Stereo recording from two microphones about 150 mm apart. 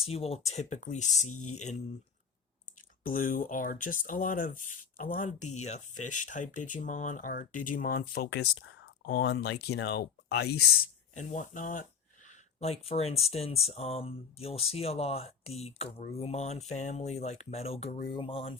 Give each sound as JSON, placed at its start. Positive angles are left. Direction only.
{"t": 0.0, "sound": "speech", "side_deg": 40}
{"t": 3.0, "sound": "speech", "side_deg": 65}
{"t": 11.1, "sound": "speech", "side_deg": 55}
{"t": 12.3, "sound": "speech", "side_deg": 45}